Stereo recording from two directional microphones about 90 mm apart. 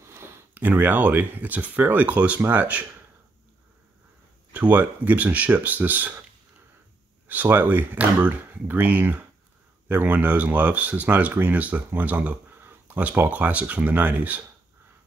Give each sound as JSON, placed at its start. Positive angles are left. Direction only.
{"t": 0.0, "sound": "speech", "side_deg": -30}
{"t": 4.5, "sound": "speech", "side_deg": -15}
{"t": 7.2, "sound": "speech", "side_deg": -20}